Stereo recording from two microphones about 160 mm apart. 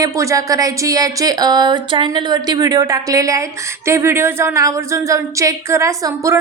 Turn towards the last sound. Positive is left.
turn(degrees=-20)  # may be behind; listen again after turning